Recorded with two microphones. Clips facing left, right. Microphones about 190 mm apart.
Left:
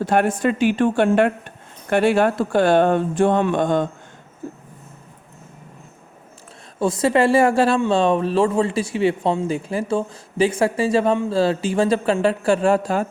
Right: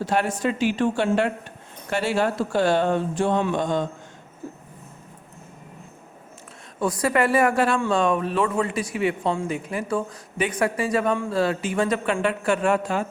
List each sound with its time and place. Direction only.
0.0 s speech: 55° left (ahead or behind)
6.7 s speech: 25° left (ahead or behind)